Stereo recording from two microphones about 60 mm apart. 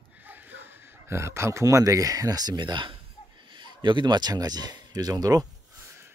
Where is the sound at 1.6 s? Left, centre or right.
Right.